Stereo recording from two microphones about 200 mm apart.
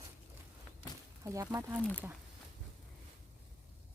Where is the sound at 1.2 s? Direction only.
15° right (ahead or behind).